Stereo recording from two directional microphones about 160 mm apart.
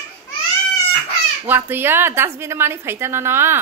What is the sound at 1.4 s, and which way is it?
A woman's voice, 15° right (ahead or behind).